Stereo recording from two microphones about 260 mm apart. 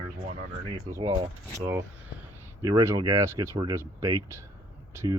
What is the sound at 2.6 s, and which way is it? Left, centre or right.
Speech, centre.